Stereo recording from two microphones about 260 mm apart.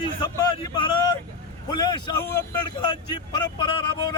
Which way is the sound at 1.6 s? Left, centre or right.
Centre.